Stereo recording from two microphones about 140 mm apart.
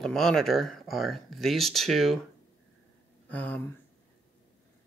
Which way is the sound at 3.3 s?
10° left (ahead or behind).